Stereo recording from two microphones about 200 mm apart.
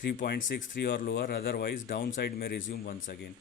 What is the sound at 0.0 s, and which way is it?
Speech, 55° left (ahead or behind).